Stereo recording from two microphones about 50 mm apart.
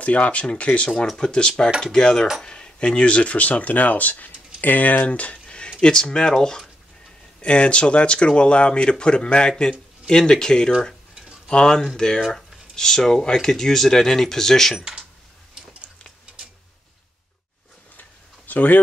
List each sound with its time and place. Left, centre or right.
0.0 s speech: left
12.2 s speech: centre
14.8 s coin: centre
18.5 s speech: left